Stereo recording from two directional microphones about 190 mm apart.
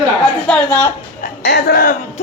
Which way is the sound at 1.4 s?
60° left (ahead or behind).